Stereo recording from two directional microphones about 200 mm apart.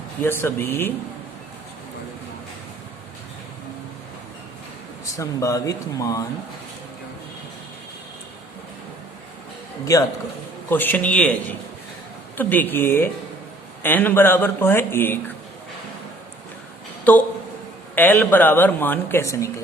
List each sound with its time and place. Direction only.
0.2 s speech: 10° left (ahead or behind)
5.1 s speech: 15° left (ahead or behind)
9.8 s speech: 15° left (ahead or behind)
17.0 s a sound: 10° left (ahead or behind)
17.9 s speech: 10° left (ahead or behind)